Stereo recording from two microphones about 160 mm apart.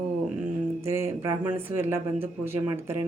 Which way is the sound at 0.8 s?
15° right (ahead or behind).